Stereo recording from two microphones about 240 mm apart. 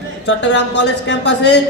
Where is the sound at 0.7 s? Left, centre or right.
Left.